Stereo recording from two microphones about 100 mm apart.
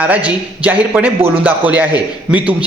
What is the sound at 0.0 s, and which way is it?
A man's voice, 15° right (ahead or behind).